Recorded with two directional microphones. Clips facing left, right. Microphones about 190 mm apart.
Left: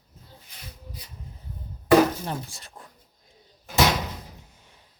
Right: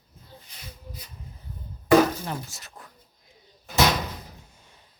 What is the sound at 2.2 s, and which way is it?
Speech, 30° left (ahead or behind).